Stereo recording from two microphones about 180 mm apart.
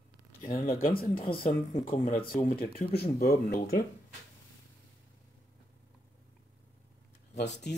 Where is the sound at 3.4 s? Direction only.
50° left (ahead or behind).